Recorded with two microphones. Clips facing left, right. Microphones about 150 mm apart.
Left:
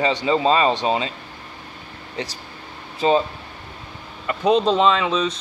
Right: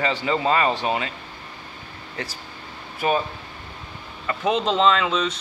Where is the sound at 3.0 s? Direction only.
25° left (ahead or behind).